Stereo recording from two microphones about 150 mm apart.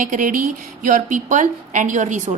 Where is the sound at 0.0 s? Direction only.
65° right (ahead or behind).